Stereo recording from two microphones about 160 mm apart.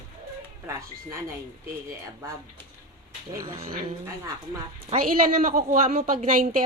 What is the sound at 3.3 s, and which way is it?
Speech, 20° right (ahead or behind).